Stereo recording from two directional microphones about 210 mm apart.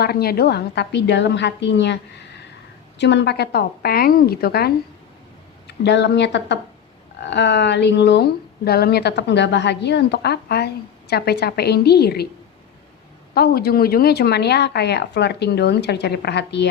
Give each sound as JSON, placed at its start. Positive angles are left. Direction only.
{"t": 0.0, "sound": "speech", "side_deg": 50}
{"t": 3.0, "sound": "speech", "side_deg": 55}
{"t": 13.3, "sound": "speech", "side_deg": 45}